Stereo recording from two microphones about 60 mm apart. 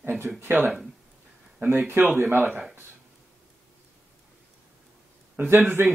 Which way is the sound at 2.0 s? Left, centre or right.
Right.